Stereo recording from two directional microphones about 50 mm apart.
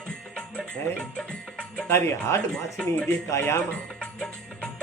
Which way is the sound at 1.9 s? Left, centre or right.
Left.